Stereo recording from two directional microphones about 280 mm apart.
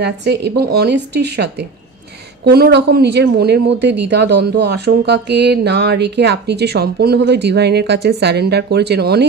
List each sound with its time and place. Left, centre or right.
0.0 s speech: right